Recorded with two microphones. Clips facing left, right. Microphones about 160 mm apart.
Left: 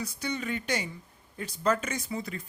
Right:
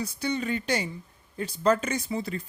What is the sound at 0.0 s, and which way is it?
Speech, 30° right (ahead or behind).